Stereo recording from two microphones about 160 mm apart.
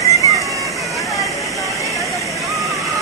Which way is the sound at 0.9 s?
Centre (ahead or behind).